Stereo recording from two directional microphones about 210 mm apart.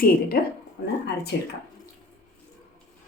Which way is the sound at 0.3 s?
45° left (ahead or behind).